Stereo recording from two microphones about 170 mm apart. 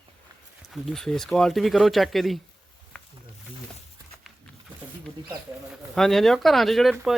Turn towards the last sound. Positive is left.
turn(degrees=0)  # may be behind; listen again after turning